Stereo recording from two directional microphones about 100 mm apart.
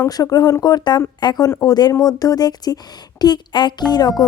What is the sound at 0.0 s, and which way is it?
A woman's voice, 35° left (ahead or behind).